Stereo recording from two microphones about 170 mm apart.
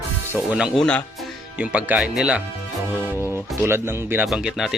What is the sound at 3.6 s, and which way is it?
Speech, 15° right (ahead or behind).